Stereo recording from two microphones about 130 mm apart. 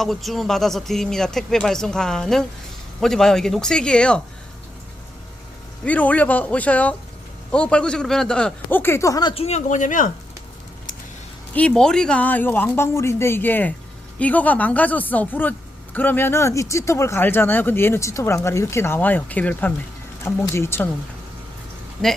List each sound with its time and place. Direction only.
0.0 s speech: centre (ahead or behind)
5.8 s speech: 10° left (ahead or behind)
9.3 s speech: 55° left (ahead or behind); by 10.1 s 85° left
11.5 s speech: 5° left (ahead or behind)